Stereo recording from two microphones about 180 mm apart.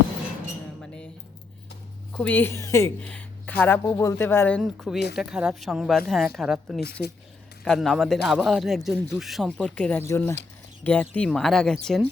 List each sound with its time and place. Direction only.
2.1 s speech: 10° left (ahead or behind)
6.7 s speech: 65° left (ahead or behind)
7.6 s speech: 5° left (ahead or behind)